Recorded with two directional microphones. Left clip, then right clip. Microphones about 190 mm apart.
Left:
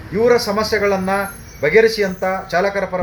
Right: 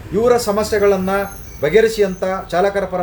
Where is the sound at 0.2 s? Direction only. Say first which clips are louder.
Even; 15° right (ahead or behind).